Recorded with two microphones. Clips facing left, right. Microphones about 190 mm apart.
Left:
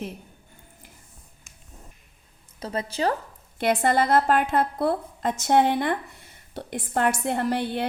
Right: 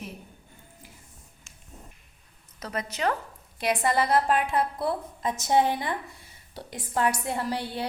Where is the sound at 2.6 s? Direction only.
30° left (ahead or behind).